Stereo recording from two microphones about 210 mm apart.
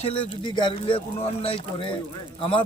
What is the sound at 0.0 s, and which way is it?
Speech, 25° left (ahead or behind).